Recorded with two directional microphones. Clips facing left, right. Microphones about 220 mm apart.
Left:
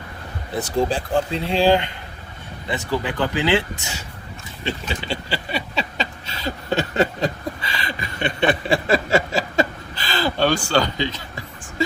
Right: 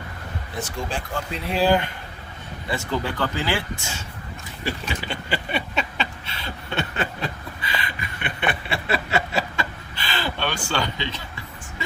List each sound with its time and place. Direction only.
0.5 s speech: 35° left (ahead or behind); by 3.9 s 20° left (ahead or behind)
4.6 s a sound: 30° left (ahead or behind)
10.0 s speech: 40° left (ahead or behind)